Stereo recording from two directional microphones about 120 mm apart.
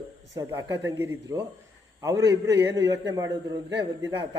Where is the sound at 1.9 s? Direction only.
30° right (ahead or behind).